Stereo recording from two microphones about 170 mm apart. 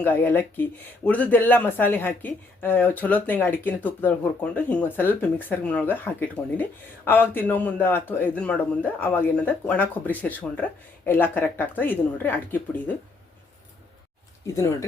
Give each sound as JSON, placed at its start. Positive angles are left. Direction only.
{"t": 0.0, "sound": "speech", "side_deg": 10}
{"t": 14.4, "sound": "speech", "side_deg": 15}